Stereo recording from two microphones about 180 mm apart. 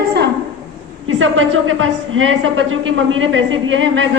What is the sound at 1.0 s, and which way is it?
A woman's voice, 90° right.